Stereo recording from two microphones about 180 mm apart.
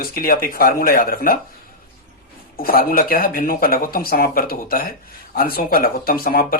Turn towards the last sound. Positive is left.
turn(degrees=55)  # may be behind; listen again after turning